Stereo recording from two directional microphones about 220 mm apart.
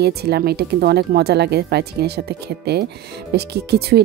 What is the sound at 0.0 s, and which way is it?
A woman's voice, 45° right (ahead or behind).